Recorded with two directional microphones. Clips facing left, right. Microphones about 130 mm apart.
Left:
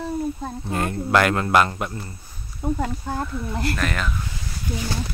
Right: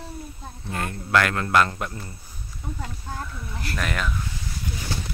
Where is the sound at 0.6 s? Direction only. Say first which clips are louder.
Left 5 dB; 25° left (ahead or behind); by 2.0 s 10° left (ahead or behind).